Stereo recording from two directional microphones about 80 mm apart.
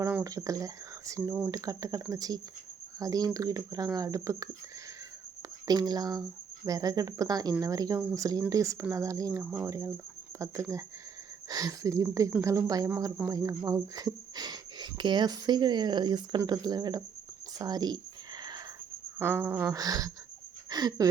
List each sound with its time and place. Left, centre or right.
0.3 s speech: right
5.6 s speech: right
19.2 s speech: right
19.7 s speech: right